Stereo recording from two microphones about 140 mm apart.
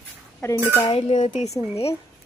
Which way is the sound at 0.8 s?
35° left (ahead or behind).